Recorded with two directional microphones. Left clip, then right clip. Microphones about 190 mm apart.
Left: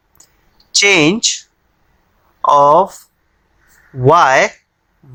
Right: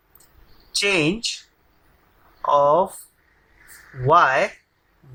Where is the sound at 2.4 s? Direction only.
45° left (ahead or behind).